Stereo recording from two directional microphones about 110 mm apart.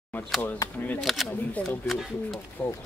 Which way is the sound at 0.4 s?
20° left (ahead or behind).